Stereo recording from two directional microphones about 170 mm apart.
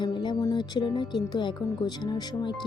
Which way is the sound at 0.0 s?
25° left (ahead or behind).